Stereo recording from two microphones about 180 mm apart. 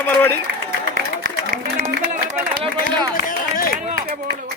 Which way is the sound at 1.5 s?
50° right (ahead or behind).